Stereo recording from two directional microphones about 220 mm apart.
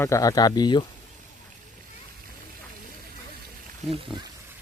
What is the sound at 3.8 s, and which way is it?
Speech, centre (ahead or behind).